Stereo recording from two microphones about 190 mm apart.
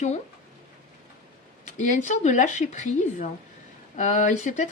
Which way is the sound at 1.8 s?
40° left (ahead or behind).